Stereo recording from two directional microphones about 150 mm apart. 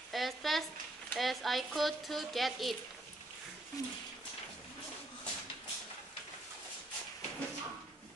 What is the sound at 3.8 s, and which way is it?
Speech, 25° left (ahead or behind).